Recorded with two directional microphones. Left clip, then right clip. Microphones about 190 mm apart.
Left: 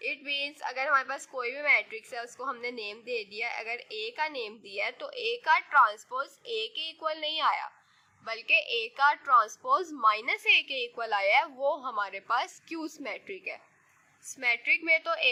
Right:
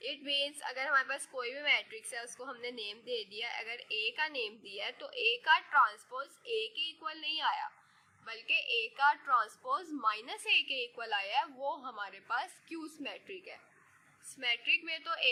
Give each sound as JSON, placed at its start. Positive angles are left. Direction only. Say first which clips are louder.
{"t": 0.0, "sound": "a woman's voice", "louder": "left 3 dB", "side_deg": 25}